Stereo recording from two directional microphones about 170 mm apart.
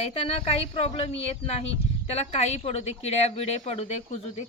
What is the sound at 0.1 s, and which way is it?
Speech, 35° left (ahead or behind).